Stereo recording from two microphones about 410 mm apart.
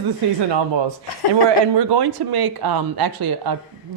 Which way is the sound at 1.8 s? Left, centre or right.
Right.